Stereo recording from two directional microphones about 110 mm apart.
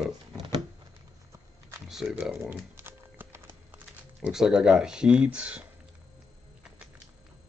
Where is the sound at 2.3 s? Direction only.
20° right (ahead or behind).